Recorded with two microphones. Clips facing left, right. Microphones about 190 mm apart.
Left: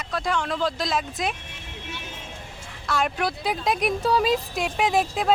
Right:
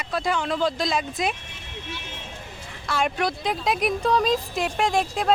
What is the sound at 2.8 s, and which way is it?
Speech, centre (ahead or behind).